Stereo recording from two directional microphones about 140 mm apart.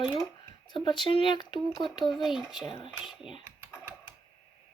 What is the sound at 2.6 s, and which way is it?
Speech, 35° left (ahead or behind).